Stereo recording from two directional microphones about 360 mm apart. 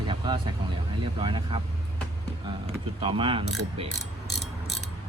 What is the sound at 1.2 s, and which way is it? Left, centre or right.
Speech, centre.